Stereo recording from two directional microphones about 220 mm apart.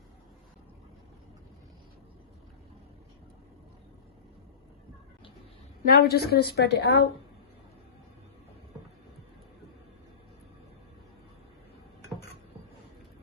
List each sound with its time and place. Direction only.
5.8 s a woman's voice: 40° left (ahead or behind)